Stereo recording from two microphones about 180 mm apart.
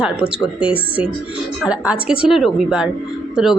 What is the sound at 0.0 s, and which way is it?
A woman's voice, 5° right (ahead or behind).